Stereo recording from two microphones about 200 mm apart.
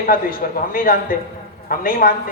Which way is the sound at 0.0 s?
45° left (ahead or behind).